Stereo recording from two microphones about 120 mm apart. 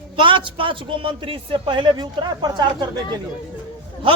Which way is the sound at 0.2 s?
45° right (ahead or behind).